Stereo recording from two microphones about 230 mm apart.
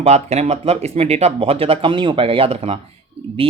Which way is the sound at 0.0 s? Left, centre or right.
Right.